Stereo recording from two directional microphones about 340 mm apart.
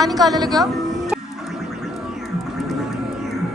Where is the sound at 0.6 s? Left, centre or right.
Centre.